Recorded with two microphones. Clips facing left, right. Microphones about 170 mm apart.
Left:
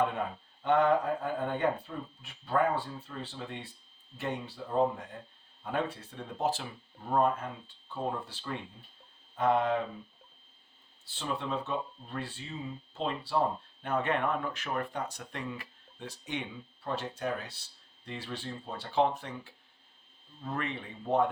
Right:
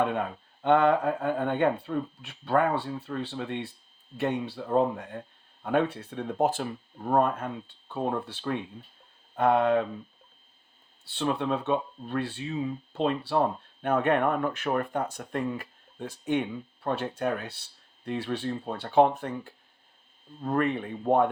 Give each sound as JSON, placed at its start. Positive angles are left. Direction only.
{"t": 0.6, "sound": "speech", "side_deg": -70}
{"t": 11.0, "sound": "speech", "side_deg": -65}